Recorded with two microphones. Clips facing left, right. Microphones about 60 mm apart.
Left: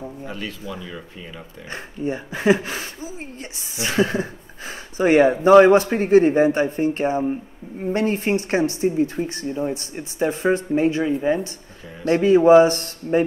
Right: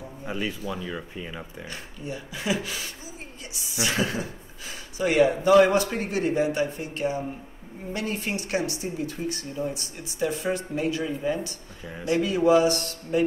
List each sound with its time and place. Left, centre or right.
0.3 s speech: centre
1.7 s speech: left